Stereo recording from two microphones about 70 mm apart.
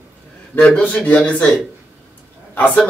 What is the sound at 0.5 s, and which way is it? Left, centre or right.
Speech, centre.